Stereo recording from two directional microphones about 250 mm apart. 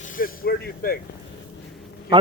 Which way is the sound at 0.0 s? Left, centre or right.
Left.